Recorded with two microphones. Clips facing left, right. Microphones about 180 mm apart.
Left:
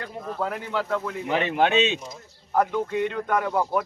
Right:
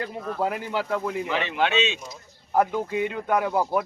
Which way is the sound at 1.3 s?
45° left (ahead or behind).